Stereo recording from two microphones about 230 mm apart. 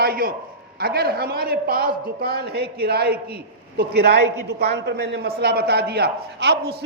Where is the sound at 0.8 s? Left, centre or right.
Right.